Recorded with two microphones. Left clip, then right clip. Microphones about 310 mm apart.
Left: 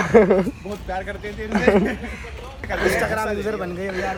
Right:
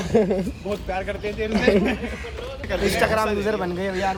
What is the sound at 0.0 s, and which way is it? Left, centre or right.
Speech, centre.